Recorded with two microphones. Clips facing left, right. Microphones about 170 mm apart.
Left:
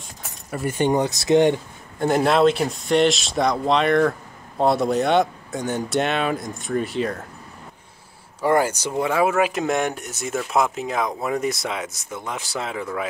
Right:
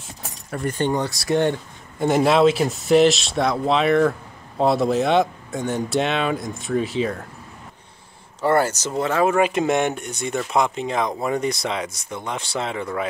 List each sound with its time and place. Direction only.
0.5 s speech: 5° left (ahead or behind)
2.0 s speech: centre (ahead or behind)
8.4 s speech: 15° left (ahead or behind)